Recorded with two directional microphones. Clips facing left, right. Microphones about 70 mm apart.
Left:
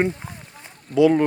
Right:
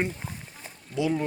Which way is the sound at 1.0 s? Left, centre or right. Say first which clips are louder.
Left 11 dB; left.